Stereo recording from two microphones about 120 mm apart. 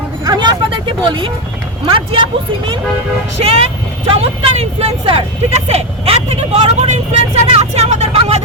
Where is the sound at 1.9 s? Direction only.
45° right (ahead or behind).